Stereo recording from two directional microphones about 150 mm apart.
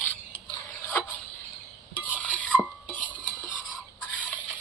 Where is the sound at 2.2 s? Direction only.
10° left (ahead or behind).